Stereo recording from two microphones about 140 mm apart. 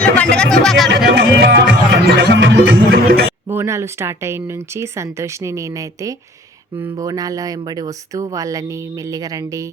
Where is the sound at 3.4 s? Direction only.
20° right (ahead or behind).